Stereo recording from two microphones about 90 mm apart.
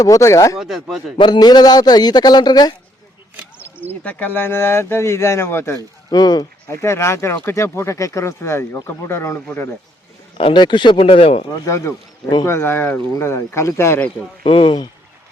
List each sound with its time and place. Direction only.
0.0 s speech: 35° left (ahead or behind)
0.5 s speech: 5° right (ahead or behind)
1.2 s a man's voice: 50° left (ahead or behind)
4.0 s speech: 15° left (ahead or behind)
6.1 s a man's voice: 50° left (ahead or behind)
6.7 s speech: 30° left (ahead or behind)
10.3 s speech: 70° left (ahead or behind); by 11.3 s 90° left
11.5 s speech: 35° left (ahead or behind)
14.4 s speech: 80° left